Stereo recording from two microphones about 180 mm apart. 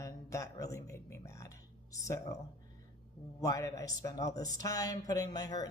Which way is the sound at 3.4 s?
20° left (ahead or behind).